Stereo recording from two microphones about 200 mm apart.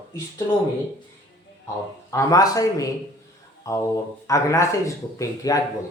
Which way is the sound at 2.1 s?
15° left (ahead or behind).